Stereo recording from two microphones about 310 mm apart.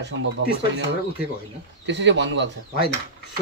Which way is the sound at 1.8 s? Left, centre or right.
Right.